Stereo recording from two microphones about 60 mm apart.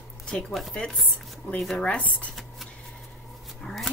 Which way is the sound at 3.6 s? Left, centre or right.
Centre.